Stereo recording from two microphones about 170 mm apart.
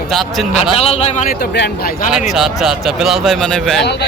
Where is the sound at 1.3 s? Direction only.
80° left.